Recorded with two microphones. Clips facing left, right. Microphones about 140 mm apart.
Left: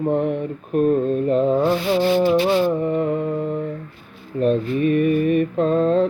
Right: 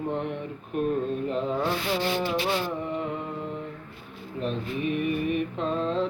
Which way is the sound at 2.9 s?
50° left (ahead or behind).